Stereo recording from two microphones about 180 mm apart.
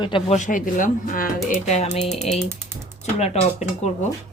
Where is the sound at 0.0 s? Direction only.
30° left (ahead or behind).